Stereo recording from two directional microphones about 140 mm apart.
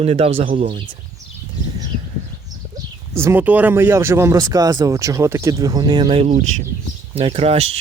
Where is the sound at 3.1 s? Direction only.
20° right (ahead or behind).